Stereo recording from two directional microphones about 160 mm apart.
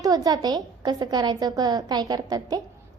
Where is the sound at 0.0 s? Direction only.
25° right (ahead or behind).